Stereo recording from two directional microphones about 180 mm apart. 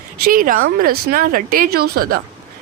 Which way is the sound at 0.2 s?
50° right (ahead or behind).